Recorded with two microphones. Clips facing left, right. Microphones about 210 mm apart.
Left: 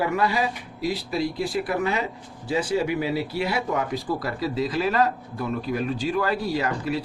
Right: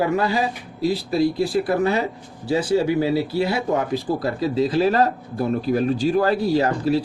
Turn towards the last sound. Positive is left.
turn(degrees=-30)  # may be behind; listen again after turning